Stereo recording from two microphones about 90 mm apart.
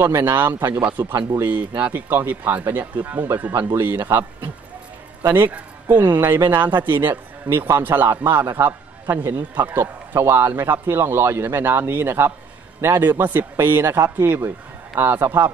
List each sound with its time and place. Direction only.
0.0 s a man's voice: 25° right (ahead or behind)
3.5 s speech: 30° right (ahead or behind)
5.3 s a man's voice: 20° right (ahead or behind)